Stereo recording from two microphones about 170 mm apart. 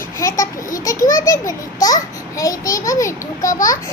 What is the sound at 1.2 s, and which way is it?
A child's voice, 20° left (ahead or behind).